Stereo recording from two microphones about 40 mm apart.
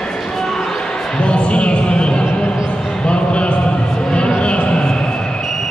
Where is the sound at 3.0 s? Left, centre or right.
Left.